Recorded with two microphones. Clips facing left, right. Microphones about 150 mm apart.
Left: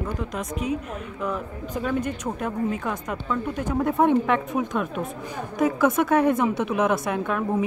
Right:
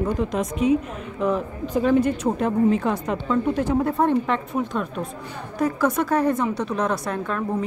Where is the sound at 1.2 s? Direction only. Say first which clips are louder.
Right 7 dB; 35° right (ahead or behind).